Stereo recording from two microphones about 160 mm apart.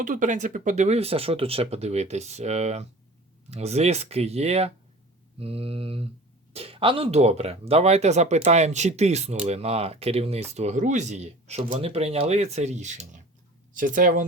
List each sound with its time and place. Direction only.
0.0 s speech: 55° right (ahead or behind)